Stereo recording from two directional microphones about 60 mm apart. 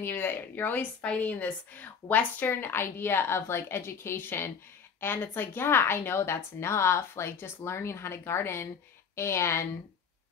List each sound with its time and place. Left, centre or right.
0.0 s a woman's voice: left
1.0 s a woman's voice: left